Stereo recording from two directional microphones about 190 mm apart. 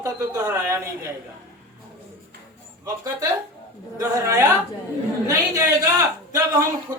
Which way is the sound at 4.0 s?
15° right (ahead or behind).